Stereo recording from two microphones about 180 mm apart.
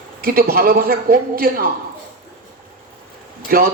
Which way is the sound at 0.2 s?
55° right (ahead or behind).